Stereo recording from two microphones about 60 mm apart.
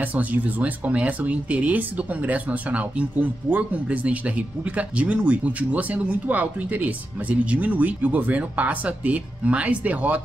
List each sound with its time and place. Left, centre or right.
0.0 s speech: right